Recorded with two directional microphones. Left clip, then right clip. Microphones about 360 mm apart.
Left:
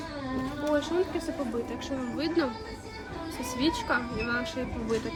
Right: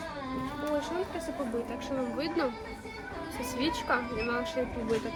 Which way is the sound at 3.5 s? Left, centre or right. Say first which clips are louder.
Left 2 dB; centre.